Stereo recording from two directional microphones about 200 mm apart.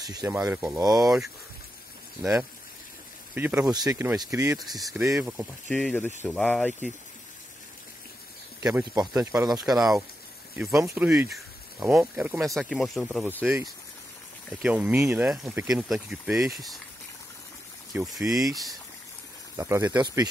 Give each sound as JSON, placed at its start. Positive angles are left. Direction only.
{"t": 0.0, "sound": "speech", "side_deg": -15}
{"t": 0.7, "sound": "speech", "side_deg": -15}
{"t": 3.3, "sound": "speech", "side_deg": -10}
{"t": 4.6, "sound": "speech", "side_deg": 0}
{"t": 9.0, "sound": "speech", "side_deg": -5}
{"t": 17.9, "sound": "speech", "side_deg": 0}
{"t": 19.5, "sound": "speech", "side_deg": -15}